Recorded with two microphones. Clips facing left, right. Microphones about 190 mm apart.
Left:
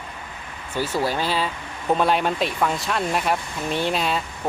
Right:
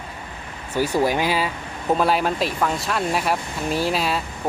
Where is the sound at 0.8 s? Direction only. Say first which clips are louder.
Right 4 dB; 15° right (ahead or behind).